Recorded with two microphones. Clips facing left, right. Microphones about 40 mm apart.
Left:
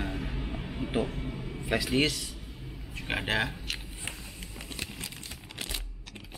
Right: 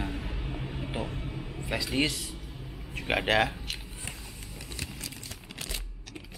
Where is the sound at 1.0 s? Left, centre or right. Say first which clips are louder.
Left 2 dB; centre.